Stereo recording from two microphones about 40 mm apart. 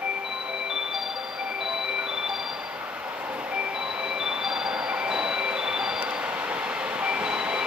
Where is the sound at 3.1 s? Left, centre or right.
Right.